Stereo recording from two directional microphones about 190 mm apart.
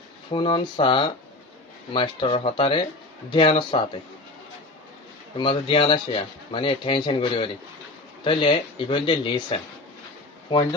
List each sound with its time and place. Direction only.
0.3 s speech: 25° left (ahead or behind)
5.4 s speech: 25° left (ahead or behind)